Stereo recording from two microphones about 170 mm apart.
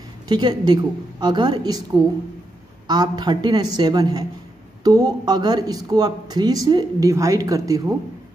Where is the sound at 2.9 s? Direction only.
25° right (ahead or behind).